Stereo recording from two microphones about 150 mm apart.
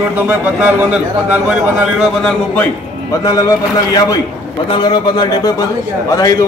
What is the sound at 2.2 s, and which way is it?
Speech, 10° left (ahead or behind).